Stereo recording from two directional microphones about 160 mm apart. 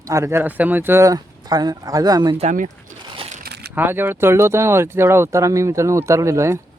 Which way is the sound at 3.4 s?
90° right.